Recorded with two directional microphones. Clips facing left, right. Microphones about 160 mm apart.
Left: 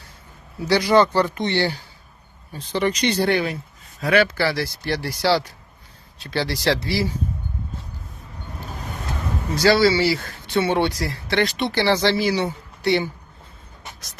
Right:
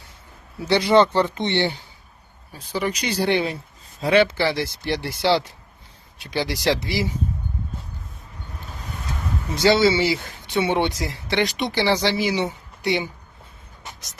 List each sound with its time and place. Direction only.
0.7 s speech: 25° right (ahead or behind)
2.5 s speech: 10° right (ahead or behind)
3.2 s speech: 25° right (ahead or behind)
9.6 s speech: 20° right (ahead or behind)